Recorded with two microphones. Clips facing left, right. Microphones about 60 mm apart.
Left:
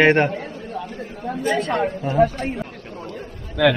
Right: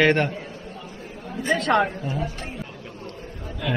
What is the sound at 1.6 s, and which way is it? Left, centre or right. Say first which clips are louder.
Speech: right 1 dB; right.